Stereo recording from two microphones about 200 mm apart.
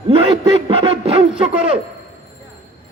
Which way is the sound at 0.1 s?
30° right (ahead or behind).